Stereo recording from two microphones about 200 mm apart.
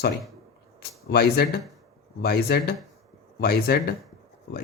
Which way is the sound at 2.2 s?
55° left (ahead or behind).